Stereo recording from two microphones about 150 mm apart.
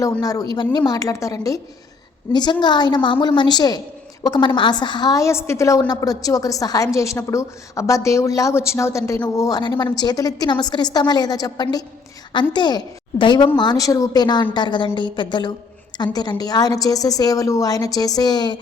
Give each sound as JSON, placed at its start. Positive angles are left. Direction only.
{"t": 0.0, "sound": "a woman's voice", "side_deg": 25}